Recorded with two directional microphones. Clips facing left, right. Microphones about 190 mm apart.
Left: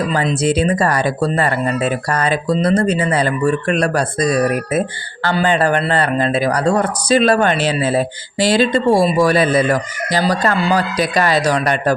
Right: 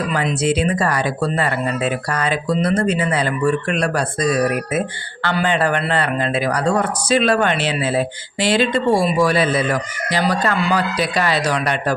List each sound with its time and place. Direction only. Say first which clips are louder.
0.1 s speech: left 2 dB; 35° left (ahead or behind)